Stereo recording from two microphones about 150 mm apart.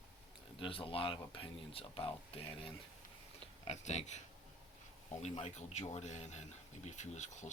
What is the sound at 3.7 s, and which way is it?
Speech, 50° left (ahead or behind).